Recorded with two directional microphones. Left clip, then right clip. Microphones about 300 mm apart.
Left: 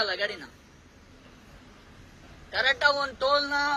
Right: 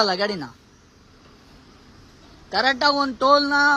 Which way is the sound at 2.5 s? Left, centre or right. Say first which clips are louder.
Right 4 dB; right.